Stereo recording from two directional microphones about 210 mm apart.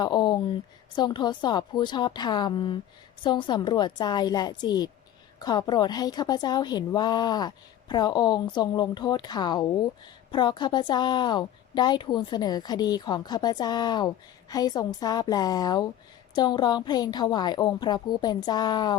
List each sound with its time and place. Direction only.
0.0 s a woman's voice: 20° left (ahead or behind)